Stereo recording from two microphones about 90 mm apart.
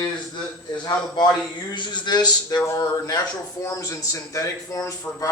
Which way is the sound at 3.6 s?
35° left (ahead or behind).